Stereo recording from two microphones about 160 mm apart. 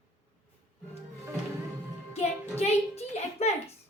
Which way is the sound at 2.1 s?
40° left (ahead or behind).